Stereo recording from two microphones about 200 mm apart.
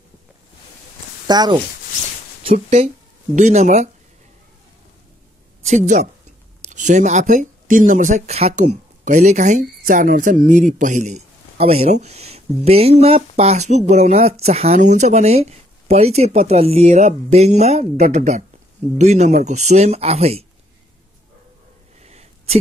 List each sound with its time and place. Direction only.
1.2 s speech: 20° right (ahead or behind)
2.4 s speech: 30° right (ahead or behind)
5.7 s speech: 35° right (ahead or behind)
22.0 s a sound: 30° right (ahead or behind)